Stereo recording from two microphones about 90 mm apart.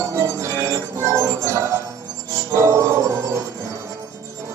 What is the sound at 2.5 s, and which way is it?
Music, 35° right (ahead or behind).